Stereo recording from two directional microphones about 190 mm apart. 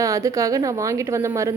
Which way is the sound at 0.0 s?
15° right (ahead or behind).